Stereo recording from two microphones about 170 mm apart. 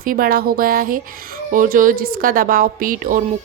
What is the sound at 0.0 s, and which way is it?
A woman's voice, 60° right (ahead or behind).